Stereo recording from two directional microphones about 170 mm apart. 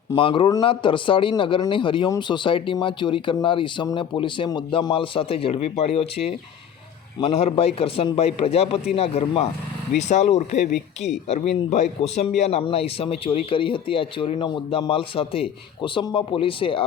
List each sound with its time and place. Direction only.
0.2 s speech: 30° left (ahead or behind)